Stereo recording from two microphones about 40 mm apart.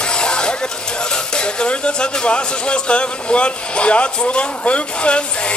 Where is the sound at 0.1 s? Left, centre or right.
Left.